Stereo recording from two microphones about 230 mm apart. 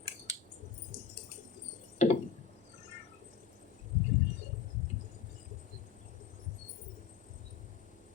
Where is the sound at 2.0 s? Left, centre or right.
Left.